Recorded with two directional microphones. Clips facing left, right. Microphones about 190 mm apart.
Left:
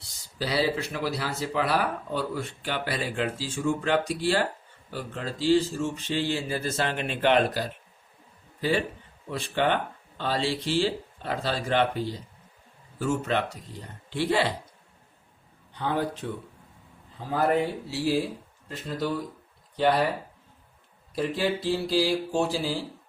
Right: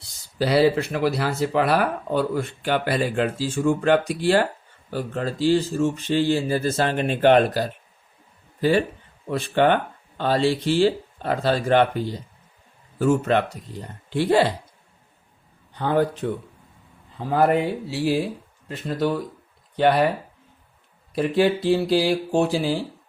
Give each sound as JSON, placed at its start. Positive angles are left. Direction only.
{"t": 0.3, "sound": "speech", "side_deg": -60}
{"t": 4.9, "sound": "speech", "side_deg": -45}
{"t": 9.3, "sound": "speech", "side_deg": -50}
{"t": 13.0, "sound": "speech", "side_deg": -55}
{"t": 15.7, "sound": "a man's voice", "side_deg": -50}
{"t": 17.3, "sound": "speech", "side_deg": -65}
{"t": 21.2, "sound": "speech", "side_deg": -65}